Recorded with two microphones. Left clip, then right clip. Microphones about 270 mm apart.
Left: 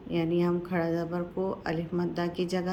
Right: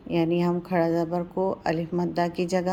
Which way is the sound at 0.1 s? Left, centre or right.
Right.